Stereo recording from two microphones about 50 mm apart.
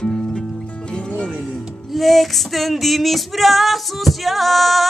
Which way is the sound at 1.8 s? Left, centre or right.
Centre.